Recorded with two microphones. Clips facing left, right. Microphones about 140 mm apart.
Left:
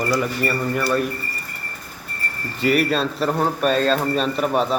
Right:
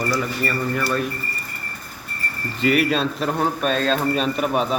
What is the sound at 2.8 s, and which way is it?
A man's voice, centre (ahead or behind).